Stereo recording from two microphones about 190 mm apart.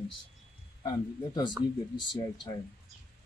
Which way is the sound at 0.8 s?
20° left (ahead or behind).